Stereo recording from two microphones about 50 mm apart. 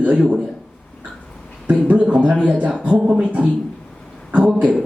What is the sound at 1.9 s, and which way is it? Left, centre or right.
Speech, right.